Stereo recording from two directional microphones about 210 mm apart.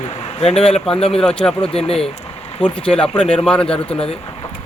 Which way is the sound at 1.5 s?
25° left (ahead or behind).